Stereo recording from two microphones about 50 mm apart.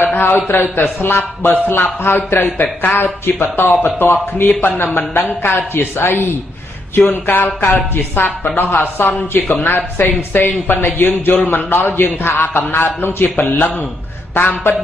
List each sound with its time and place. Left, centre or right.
0.0 s a man's voice: left
7.1 s a sound: left
7.9 s speech: left